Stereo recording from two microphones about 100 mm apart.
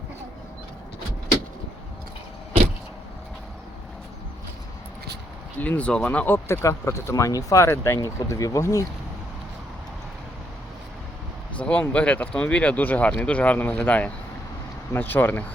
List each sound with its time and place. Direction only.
5.5 s speech: 15° left (ahead or behind); by 8.8 s 30° left (ahead or behind)
11.6 s speech: 10° left (ahead or behind)